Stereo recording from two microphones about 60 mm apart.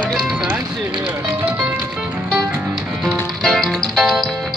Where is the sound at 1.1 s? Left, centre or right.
Right.